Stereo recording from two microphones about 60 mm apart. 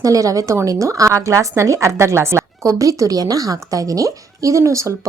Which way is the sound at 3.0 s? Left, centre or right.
Right.